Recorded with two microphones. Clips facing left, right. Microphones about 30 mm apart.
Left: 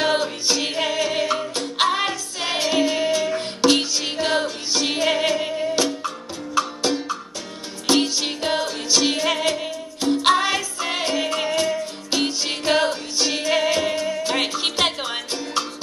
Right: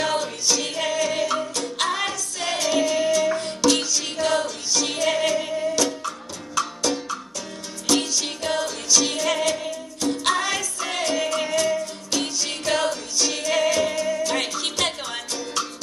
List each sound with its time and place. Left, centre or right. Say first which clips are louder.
0.0 s music: left 3 dB; left